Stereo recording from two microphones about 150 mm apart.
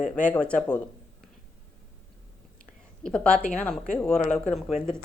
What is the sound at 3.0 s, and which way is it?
Speech, 5° left (ahead or behind).